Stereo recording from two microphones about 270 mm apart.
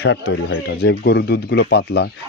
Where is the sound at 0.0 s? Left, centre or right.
Left.